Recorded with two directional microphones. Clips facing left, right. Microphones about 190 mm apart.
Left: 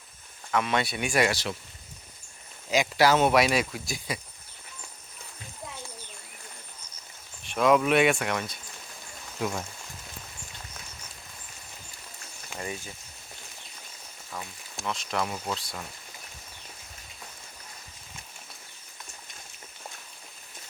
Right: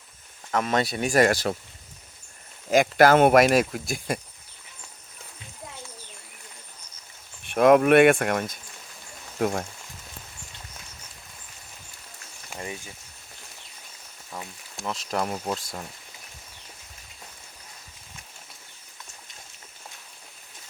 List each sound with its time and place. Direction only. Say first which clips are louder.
0.5 s speech: right 2 dB; 40° right (ahead or behind)
2.6 s speech: right 5 dB; 50° right (ahead or behind)
7.4 s speech: right 5 dB; 55° right (ahead or behind)
12.5 s speech: even; 20° right (ahead or behind)
14.9 s speech: right 4 dB; 40° right (ahead or behind)